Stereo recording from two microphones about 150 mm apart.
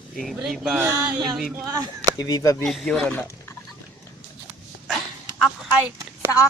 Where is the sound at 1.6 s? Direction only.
20° right (ahead or behind).